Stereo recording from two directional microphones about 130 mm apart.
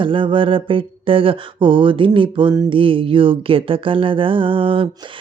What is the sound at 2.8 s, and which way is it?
Speech, 40° right (ahead or behind).